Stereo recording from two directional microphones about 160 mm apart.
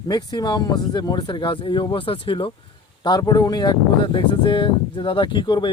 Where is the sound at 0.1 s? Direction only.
25° left (ahead or behind).